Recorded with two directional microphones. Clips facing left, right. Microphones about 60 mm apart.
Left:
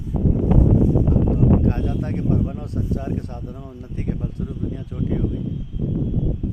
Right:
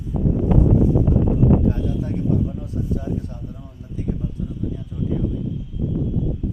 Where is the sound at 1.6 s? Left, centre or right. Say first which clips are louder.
Even; left.